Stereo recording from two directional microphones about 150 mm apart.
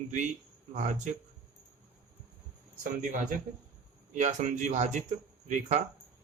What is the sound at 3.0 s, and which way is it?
Speech, 55° right (ahead or behind).